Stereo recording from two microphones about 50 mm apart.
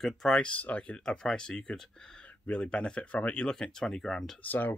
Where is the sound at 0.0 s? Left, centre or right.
Centre.